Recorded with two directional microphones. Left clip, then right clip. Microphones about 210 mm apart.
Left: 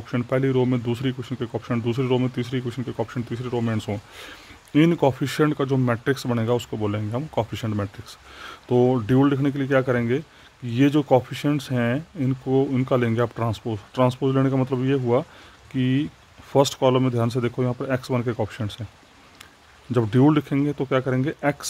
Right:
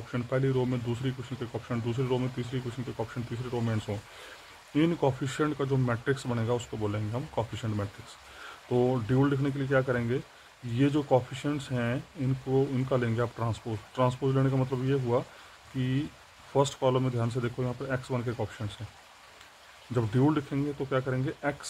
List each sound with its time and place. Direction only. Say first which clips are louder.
0.1 s speech: left 7 dB; 45° left (ahead or behind)
19.9 s speech: left 8 dB; 50° left (ahead or behind)